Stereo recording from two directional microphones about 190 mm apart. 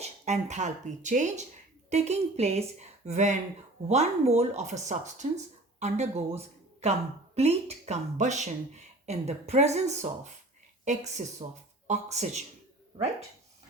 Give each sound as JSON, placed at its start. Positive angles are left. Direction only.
{"t": 0.0, "sound": "a woman's voice", "side_deg": -35}